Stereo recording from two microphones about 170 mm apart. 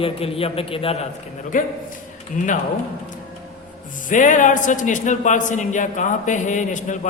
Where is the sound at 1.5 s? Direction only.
50° left (ahead or behind).